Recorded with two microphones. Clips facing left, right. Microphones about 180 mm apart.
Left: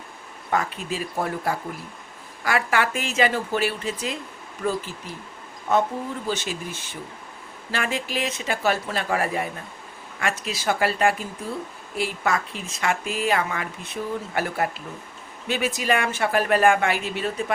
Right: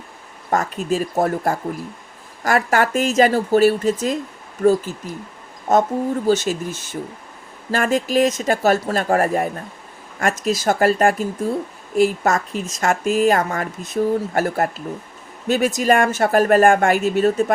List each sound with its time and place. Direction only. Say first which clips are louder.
0.5 s speech: right 6 dB; 45° right (ahead or behind)